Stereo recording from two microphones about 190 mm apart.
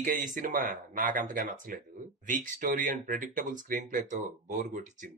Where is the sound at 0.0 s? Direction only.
45° right (ahead or behind).